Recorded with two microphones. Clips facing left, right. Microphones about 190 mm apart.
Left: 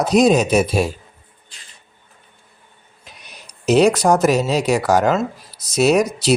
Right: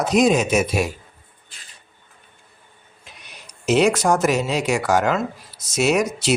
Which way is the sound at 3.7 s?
35° left (ahead or behind).